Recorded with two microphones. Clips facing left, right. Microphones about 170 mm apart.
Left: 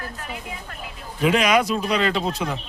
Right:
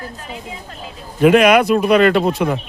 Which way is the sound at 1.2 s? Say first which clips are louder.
Right 8 dB; 60° right (ahead or behind).